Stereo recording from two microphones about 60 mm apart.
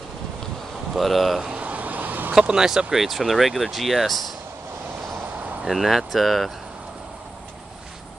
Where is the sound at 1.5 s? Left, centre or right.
Right.